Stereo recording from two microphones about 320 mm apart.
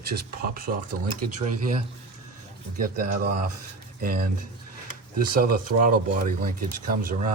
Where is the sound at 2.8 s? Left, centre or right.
Right.